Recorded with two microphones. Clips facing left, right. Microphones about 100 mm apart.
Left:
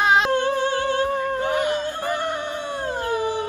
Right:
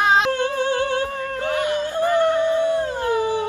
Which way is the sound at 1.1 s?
20° left (ahead or behind).